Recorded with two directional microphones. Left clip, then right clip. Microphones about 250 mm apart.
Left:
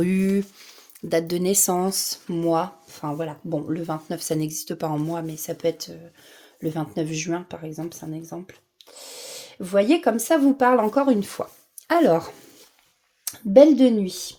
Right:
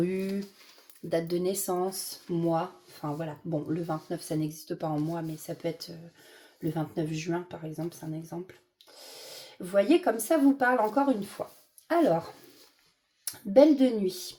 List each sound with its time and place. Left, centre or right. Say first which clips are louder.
1.1 s speech: left 7 dB; left
13.5 s speech: left 7 dB; left